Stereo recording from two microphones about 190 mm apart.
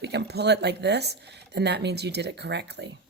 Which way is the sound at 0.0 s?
60° right (ahead or behind).